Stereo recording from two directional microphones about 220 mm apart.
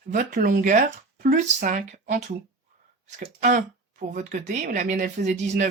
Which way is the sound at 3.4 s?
40° right (ahead or behind).